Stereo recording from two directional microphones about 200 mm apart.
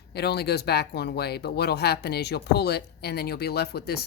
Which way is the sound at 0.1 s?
55° left (ahead or behind).